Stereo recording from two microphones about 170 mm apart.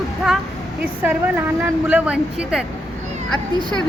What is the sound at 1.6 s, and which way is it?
Speech, 10° right (ahead or behind).